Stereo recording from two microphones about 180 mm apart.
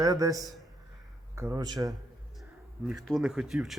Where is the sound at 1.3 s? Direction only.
15° right (ahead or behind).